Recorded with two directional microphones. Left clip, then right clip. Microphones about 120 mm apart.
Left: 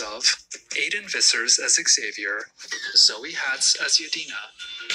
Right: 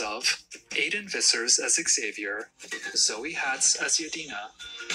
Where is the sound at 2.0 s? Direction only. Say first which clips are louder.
Left 4 dB; 30° right (ahead or behind).